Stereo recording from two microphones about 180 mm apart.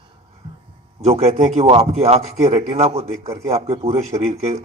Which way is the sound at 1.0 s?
35° right (ahead or behind).